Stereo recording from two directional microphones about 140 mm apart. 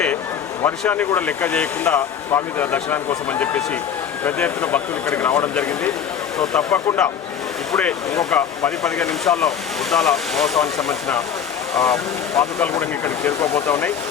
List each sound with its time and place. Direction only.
0.6 s speech: 15° left (ahead or behind)
12.4 s speech: 20° left (ahead or behind)